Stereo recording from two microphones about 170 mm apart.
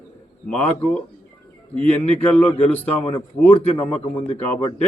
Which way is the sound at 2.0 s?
10° left (ahead or behind).